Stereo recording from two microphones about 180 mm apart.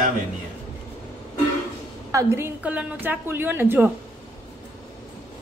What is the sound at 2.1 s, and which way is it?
A woman's voice, 15° right (ahead or behind).